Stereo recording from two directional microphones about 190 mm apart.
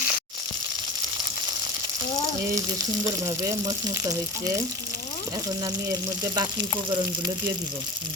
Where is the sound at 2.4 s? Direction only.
15° right (ahead or behind).